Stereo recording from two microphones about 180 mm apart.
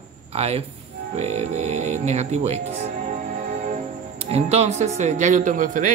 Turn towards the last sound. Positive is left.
turn(degrees=-45)  # may be behind; listen again after turning